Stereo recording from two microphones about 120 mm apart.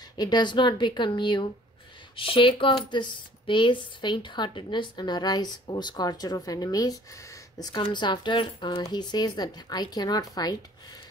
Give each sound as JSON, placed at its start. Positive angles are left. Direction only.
{"t": 0.2, "sound": "speech", "side_deg": 40}